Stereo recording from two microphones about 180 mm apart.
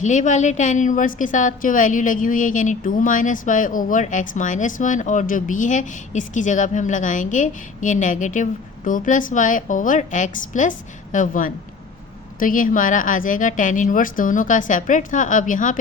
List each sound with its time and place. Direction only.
0.0 s a woman's voice: 45° left (ahead or behind)